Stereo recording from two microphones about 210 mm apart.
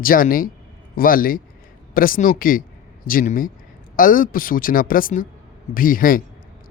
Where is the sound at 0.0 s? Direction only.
40° left (ahead or behind).